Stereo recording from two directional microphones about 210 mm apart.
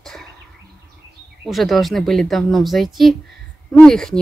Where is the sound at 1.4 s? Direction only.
Centre (ahead or behind).